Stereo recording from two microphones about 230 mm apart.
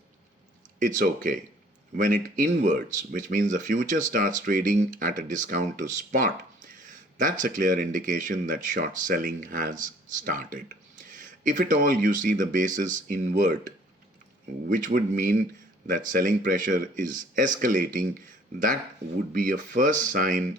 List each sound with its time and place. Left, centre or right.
0.8 s speech: right
19.3 s speech: right